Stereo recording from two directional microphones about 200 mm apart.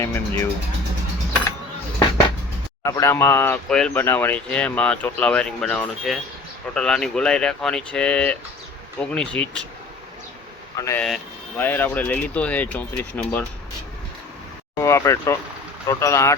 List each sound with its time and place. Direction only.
0.0 s speech: 15° left (ahead or behind)
2.8 s speech: 15° left (ahead or behind)
10.8 s speech: 15° left (ahead or behind)
11.0 s speech: 5° left (ahead or behind)
14.8 s speech: 15° left (ahead or behind)